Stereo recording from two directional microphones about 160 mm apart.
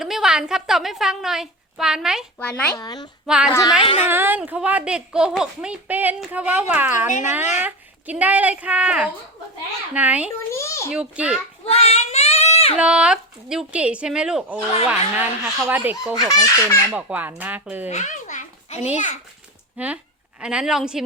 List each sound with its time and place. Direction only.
0.0 s a woman's voice: 5° right (ahead or behind)
2.4 s speech: 5° left (ahead or behind)
2.7 s a child's voice: 25° left (ahead or behind)
3.2 s a woman's voice: 5° right (ahead or behind)
3.5 s a child's voice: 20° left (ahead or behind)
3.8 s a woman's voice: 35° left (ahead or behind)
4.1 s speech: 10° right (ahead or behind)
10.5 s a sound: 15° left (ahead or behind)
10.9 s speech: 5° right (ahead or behind)
11.6 s child singing: 40° left (ahead or behind)
12.7 s a woman's voice: 5° right (ahead or behind)
17.8 s a sound: 50° left (ahead or behind)
18.9 s a child's voice: 50° left (ahead or behind)
19.7 s a woman's voice: 10° right (ahead or behind)